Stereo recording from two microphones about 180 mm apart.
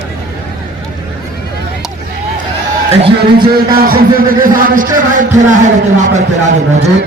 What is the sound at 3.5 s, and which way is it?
A man's voice, 55° right (ahead or behind).